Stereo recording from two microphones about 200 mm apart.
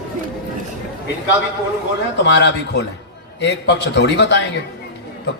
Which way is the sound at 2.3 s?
60° left (ahead or behind).